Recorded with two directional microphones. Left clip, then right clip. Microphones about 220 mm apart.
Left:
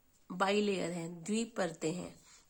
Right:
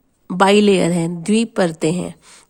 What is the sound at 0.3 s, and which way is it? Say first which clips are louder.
A woman's voice: right 19 dB; 50° right (ahead or behind).